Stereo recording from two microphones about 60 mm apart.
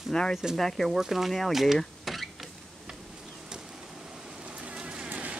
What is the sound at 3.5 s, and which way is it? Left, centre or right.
Rain, centre.